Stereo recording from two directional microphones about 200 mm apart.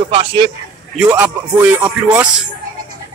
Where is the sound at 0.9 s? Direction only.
5° right (ahead or behind).